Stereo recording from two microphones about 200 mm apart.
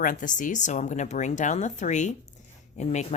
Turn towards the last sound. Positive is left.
turn(degrees=35)  # may be behind; listen again after turning